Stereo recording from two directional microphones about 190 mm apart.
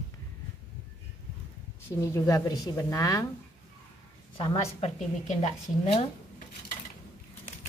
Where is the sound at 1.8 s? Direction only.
15° left (ahead or behind).